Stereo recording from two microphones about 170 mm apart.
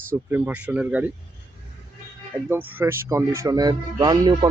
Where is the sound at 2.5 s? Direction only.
15° right (ahead or behind).